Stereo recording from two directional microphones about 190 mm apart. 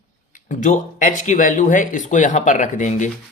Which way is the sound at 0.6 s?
45° left (ahead or behind).